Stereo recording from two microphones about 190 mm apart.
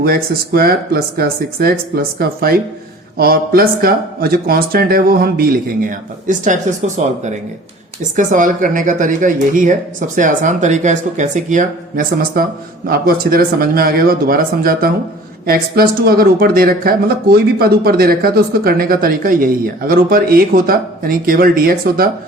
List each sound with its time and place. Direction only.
0.0 s speech: 50° right (ahead or behind)